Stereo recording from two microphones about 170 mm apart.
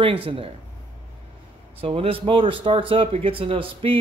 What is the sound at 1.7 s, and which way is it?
Speech, 35° right (ahead or behind).